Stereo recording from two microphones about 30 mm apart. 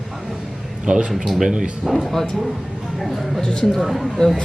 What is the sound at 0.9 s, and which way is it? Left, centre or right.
Speech, right.